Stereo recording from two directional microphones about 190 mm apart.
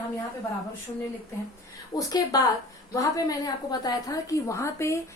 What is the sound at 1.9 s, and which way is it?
A woman's voice, 20° left (ahead or behind).